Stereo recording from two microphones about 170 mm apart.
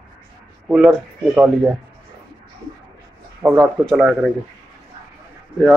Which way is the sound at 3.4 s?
Centre (ahead or behind).